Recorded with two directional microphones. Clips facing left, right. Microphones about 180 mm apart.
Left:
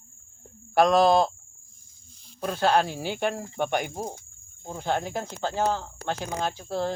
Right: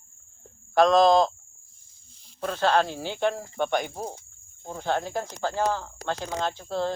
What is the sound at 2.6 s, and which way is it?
Speech, 15° left (ahead or behind).